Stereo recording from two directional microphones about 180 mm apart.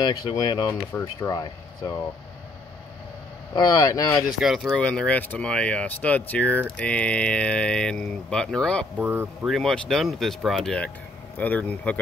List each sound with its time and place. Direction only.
0.0 s speech: 25° left (ahead or behind)
3.5 s speech: 20° left (ahead or behind)
4.4 s speech: centre (ahead or behind)
8.9 s speech: 10° right (ahead or behind)
9.5 s speech: centre (ahead or behind)